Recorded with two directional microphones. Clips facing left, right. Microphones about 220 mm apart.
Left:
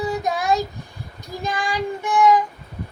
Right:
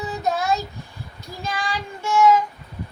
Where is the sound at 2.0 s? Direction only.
15° left (ahead or behind).